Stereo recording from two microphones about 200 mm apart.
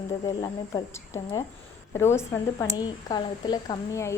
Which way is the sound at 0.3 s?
15° left (ahead or behind).